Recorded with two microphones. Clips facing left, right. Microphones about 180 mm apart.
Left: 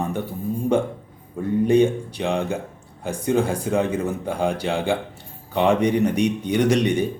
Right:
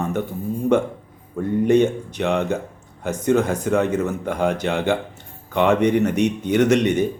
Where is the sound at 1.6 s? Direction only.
10° left (ahead or behind).